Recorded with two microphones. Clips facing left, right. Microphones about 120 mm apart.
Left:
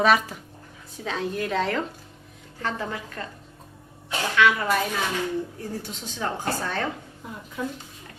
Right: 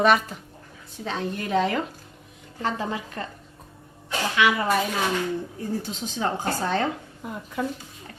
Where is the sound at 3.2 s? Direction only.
30° right (ahead or behind).